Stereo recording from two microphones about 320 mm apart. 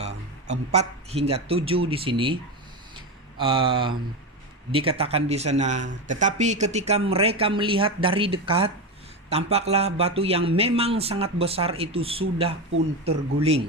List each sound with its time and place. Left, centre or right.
0.7 s speech: centre
2.9 s a sound: centre
4.7 s speech: centre